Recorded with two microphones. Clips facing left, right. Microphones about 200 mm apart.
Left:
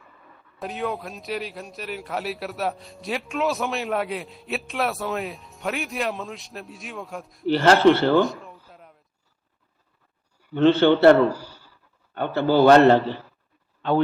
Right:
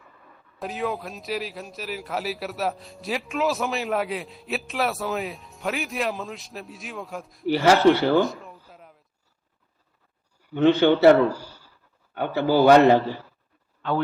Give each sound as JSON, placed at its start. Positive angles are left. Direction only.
{"t": 0.6, "sound": "a man's voice", "side_deg": 0}
{"t": 7.4, "sound": "a man's voice", "side_deg": -10}
{"t": 8.2, "sound": "a sound", "side_deg": 0}
{"t": 10.5, "sound": "a man's voice", "side_deg": -15}
{"t": 13.8, "sound": "speech", "side_deg": 25}